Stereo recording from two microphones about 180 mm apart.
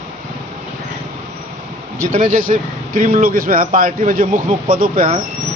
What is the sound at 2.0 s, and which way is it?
A man's voice, 45° right (ahead or behind).